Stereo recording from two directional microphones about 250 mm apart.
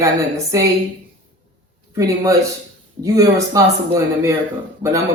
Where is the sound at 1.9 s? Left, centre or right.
Centre.